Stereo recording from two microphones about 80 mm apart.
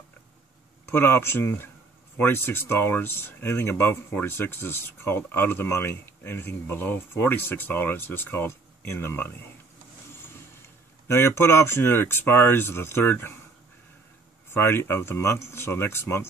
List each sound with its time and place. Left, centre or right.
0.8 s speech: left
11.1 s speech: left
14.5 s speech: left